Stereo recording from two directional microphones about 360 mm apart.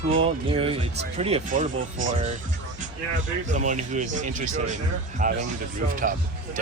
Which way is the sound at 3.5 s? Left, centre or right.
Centre.